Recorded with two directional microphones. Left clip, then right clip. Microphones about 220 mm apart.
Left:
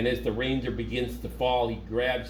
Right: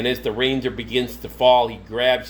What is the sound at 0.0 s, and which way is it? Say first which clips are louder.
Speech: right 6 dB; 35° right (ahead or behind).